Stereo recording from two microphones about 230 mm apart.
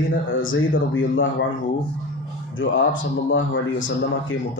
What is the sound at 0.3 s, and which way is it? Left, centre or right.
Speech, left.